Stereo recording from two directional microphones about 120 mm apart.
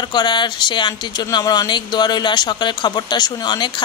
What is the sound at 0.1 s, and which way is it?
Speech, 40° left (ahead or behind).